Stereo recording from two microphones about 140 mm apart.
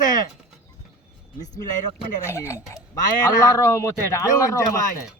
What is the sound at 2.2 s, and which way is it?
Speech, 20° left (ahead or behind).